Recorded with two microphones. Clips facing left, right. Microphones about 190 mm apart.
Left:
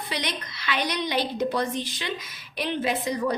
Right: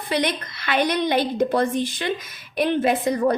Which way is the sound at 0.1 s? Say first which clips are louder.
Right 10 dB; 55° right (ahead or behind).